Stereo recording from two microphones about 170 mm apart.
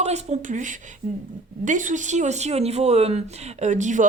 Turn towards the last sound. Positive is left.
turn(degrees=-45)  # may be behind; listen again after turning